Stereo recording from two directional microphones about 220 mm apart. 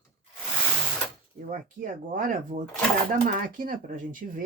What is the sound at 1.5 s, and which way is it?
Speech, 40° right (ahead or behind).